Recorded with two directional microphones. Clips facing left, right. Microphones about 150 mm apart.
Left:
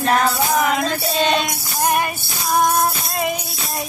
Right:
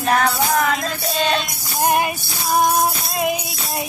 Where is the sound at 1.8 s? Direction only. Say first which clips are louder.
Right 1 dB; 20° right (ahead or behind).